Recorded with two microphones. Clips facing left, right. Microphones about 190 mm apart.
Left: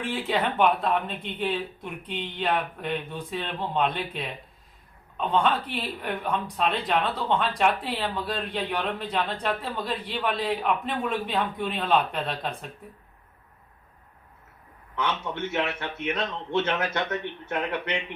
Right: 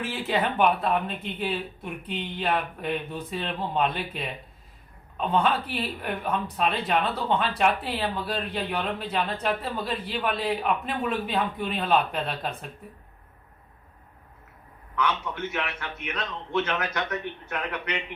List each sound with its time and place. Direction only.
0.1 s speech: centre (ahead or behind)
15.5 s a man's voice: 25° left (ahead or behind)